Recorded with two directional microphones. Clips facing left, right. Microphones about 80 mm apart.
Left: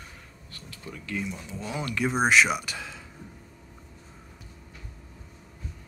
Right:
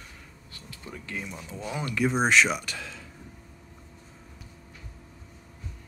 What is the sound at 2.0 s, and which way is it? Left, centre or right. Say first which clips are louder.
Speech: even; centre.